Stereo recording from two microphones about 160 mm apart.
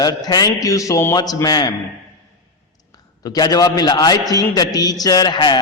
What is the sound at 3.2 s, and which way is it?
A man's voice, 25° left (ahead or behind).